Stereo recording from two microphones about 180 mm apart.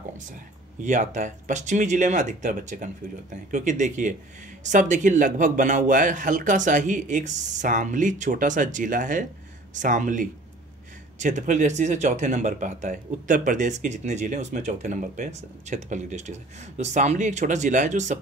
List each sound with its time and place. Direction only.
0.8 s speech: 40° right (ahead or behind)